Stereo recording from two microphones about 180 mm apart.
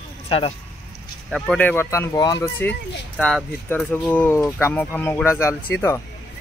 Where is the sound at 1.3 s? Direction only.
5° left (ahead or behind).